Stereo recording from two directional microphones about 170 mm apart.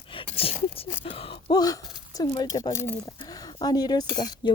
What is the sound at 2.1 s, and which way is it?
Speech, 20° left (ahead or behind).